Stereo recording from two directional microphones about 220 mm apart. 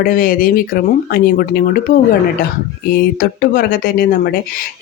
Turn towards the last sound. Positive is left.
turn(degrees=45)  # may be behind; listen again after turning